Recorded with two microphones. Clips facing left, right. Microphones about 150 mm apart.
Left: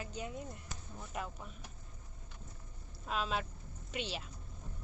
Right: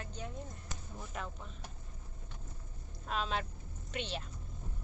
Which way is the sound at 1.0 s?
5° left (ahead or behind).